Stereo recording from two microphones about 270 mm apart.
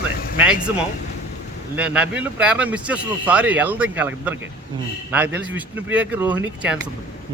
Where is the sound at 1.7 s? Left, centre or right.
Centre.